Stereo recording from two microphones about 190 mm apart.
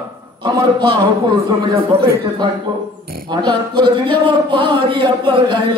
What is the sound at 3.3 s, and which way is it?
A man's voice, 25° right (ahead or behind).